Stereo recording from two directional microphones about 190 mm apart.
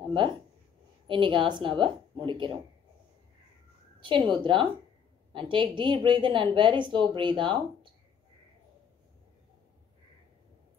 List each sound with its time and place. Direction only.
0.1 s a woman's voice: 25° right (ahead or behind)
4.0 s a woman's voice: 25° right (ahead or behind)